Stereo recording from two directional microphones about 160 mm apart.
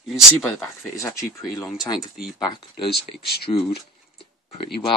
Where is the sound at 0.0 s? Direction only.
Centre (ahead or behind).